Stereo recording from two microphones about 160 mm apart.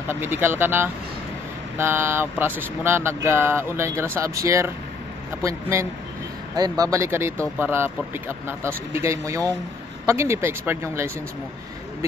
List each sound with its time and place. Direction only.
0.1 s speech: 15° right (ahead or behind)